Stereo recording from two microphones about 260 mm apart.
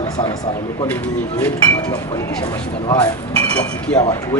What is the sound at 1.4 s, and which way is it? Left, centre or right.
Speech, centre.